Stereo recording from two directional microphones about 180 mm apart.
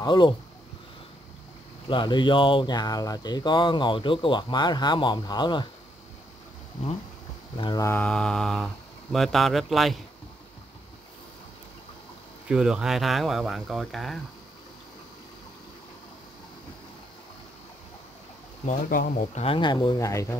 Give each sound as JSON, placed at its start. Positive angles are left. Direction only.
{"t": 0.0, "sound": "speech", "side_deg": 25}
{"t": 1.9, "sound": "speech", "side_deg": 25}
{"t": 7.5, "sound": "speech", "side_deg": 25}
{"t": 12.4, "sound": "speech", "side_deg": -5}
{"t": 18.7, "sound": "speech", "side_deg": 50}
{"t": 19.4, "sound": "speech", "side_deg": 25}